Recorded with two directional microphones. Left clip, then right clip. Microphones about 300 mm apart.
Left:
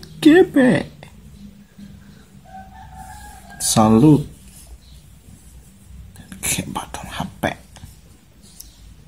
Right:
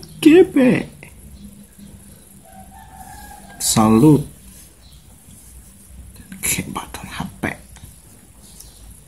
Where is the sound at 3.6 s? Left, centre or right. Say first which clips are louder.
Even; centre.